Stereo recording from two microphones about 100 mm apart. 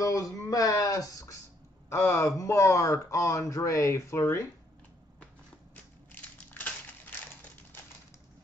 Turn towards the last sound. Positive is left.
turn(degrees=15)  # may be behind; listen again after turning